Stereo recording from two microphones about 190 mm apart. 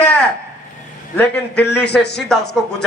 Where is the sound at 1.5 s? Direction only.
60° left (ahead or behind).